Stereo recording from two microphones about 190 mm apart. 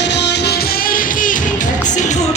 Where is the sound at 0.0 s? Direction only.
65° left (ahead or behind).